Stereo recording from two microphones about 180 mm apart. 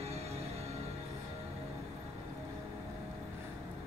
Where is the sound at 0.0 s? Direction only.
35° right (ahead or behind).